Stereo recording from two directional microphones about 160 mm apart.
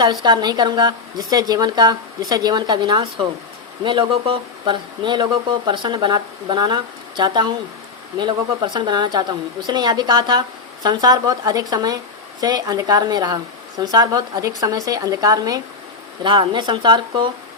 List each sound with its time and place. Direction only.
0.0 s speech: 30° right (ahead or behind)